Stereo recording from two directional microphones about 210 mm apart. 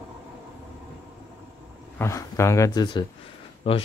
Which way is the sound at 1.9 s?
15° left (ahead or behind).